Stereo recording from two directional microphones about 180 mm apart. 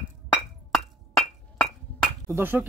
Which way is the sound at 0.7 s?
Centre (ahead or behind).